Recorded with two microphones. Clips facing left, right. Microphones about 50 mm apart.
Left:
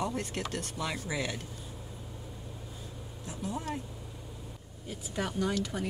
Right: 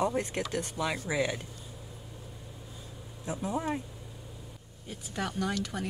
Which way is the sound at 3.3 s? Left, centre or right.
Right.